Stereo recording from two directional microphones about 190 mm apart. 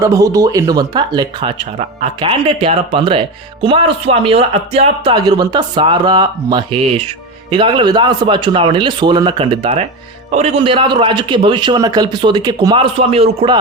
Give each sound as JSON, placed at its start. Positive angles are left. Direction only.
{"t": 0.0, "sound": "speech", "side_deg": -15}